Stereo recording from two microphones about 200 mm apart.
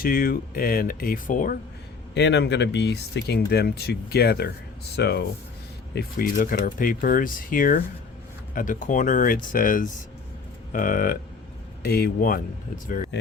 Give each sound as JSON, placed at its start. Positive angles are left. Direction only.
{"t": 0.0, "sound": "speech", "side_deg": 45}
{"t": 2.1, "sound": "speech", "side_deg": 60}